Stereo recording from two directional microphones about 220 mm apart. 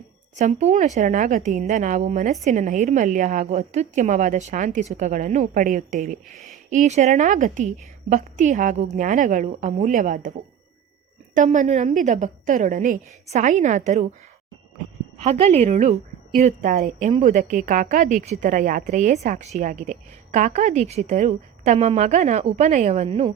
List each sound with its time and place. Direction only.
0.3 s a woman's voice: 30° right (ahead or behind)
11.3 s a woman's voice: 35° right (ahead or behind)
15.2 s a woman's voice: 30° right (ahead or behind)